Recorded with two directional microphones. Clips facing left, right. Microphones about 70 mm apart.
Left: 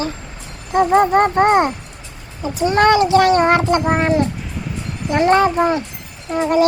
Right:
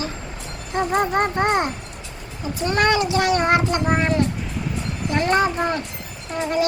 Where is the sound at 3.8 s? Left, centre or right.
Left.